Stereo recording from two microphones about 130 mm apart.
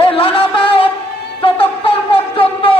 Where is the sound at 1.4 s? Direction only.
45° left (ahead or behind).